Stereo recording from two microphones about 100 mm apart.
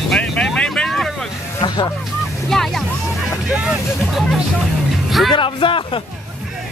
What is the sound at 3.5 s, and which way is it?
Speech, 10° right (ahead or behind).